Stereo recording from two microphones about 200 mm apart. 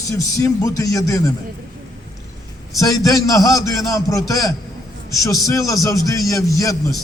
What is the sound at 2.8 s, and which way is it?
A man's voice, 15° left (ahead or behind).